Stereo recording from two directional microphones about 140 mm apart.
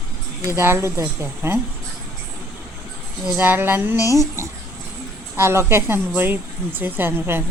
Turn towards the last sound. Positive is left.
turn(degrees=-15)  # may be behind; listen again after turning